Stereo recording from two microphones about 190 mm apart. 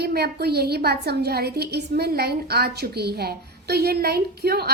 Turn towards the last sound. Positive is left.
turn(degrees=-55)  # may be behind; listen again after turning